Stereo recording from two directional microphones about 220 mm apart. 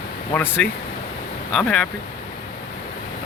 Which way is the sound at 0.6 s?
5° left (ahead or behind).